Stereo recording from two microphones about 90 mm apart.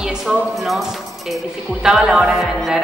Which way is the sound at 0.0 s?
5° right (ahead or behind).